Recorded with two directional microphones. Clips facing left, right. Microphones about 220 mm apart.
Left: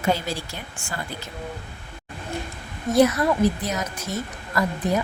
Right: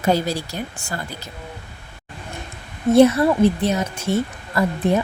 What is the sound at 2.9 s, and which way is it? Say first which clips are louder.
A woman's voice: right 5 dB; 30° right (ahead or behind).